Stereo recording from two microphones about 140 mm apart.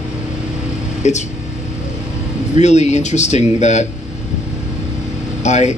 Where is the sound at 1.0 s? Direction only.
55° left (ahead or behind).